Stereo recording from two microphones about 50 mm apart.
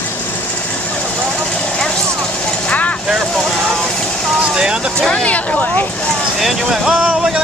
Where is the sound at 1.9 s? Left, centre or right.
Centre.